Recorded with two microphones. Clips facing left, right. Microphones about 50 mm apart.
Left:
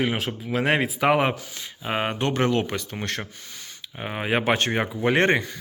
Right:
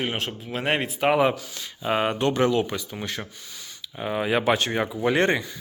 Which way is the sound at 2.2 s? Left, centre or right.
Left.